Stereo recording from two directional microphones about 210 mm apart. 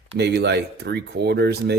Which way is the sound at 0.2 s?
50° right (ahead or behind).